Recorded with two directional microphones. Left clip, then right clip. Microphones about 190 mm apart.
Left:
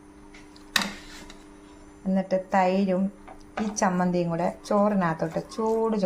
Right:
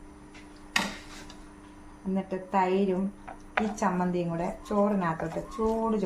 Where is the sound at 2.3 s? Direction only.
40° left (ahead or behind).